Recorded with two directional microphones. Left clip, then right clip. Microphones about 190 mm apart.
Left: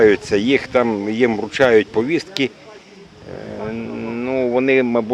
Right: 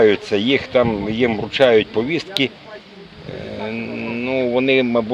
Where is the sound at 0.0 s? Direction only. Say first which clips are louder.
Left 1 dB; 20° left (ahead or behind).